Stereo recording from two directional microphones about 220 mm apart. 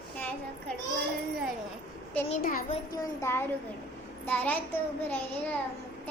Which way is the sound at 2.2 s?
35° left (ahead or behind).